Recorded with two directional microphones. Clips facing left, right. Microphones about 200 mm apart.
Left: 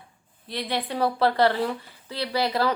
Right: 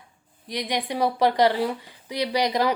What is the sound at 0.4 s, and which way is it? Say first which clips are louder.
A woman's voice: right 1 dB; 15° right (ahead or behind).